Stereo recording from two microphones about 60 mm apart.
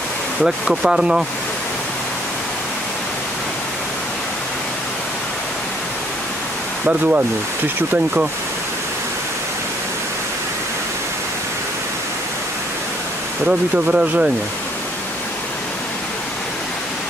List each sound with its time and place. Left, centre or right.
0.7 s speech: centre
6.9 s speech: right
13.5 s speech: right